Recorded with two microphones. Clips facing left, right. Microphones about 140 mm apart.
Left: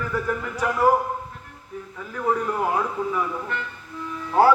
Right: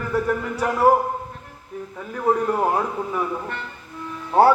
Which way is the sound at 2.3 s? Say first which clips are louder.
Right 3 dB; 30° right (ahead or behind).